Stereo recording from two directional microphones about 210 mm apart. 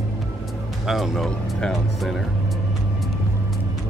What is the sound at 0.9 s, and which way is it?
Speech, centre (ahead or behind).